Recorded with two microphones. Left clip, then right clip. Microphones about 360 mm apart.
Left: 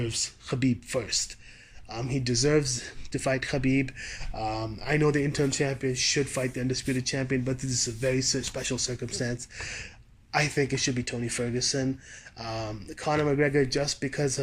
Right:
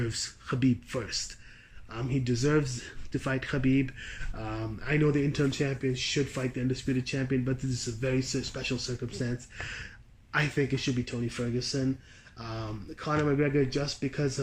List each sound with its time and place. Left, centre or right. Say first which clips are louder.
0.0 s speech: left 3 dB; centre